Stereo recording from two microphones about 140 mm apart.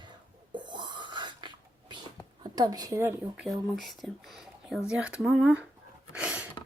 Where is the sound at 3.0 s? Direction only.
15° right (ahead or behind).